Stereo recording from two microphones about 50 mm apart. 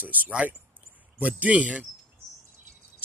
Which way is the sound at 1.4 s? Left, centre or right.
Right.